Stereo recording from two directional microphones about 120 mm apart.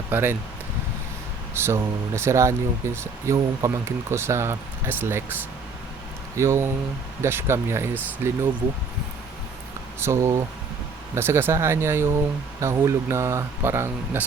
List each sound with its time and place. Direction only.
0.1 s speech: 20° right (ahead or behind)
1.5 s speech: 20° right (ahead or behind)
6.3 s speech: 25° right (ahead or behind)
10.0 s speech: 20° right (ahead or behind)